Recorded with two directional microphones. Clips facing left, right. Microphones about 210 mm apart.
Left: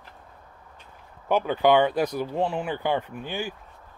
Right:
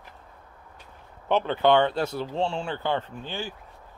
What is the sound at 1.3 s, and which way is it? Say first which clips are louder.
Speech: left 1 dB; 10° left (ahead or behind).